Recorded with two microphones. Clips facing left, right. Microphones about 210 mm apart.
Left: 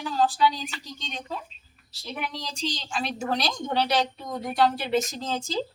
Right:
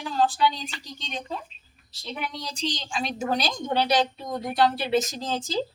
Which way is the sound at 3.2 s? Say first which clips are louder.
Right 2 dB; 15° right (ahead or behind).